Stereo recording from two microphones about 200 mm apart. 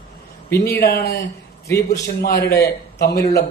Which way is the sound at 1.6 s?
15° left (ahead or behind).